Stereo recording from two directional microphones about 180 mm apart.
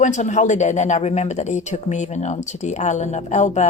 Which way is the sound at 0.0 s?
40° left (ahead or behind).